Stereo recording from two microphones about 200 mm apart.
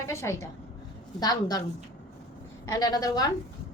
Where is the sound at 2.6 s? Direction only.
20° left (ahead or behind).